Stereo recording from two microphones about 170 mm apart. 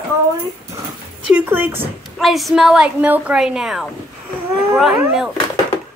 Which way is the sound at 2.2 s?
Centre (ahead or behind).